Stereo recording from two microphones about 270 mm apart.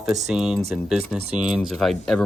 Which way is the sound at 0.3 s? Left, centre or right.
Centre.